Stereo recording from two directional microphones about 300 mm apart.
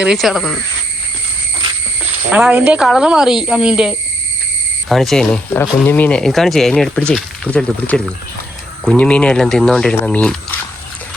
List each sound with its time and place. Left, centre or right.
0.0 s speech: centre
2.3 s speech: centre